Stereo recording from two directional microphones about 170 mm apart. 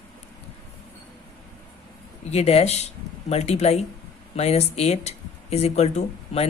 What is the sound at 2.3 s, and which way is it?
Speech, 35° left (ahead or behind).